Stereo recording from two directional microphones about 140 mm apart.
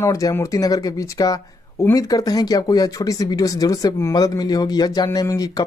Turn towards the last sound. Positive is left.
turn(degrees=25)  # may be behind; listen again after turning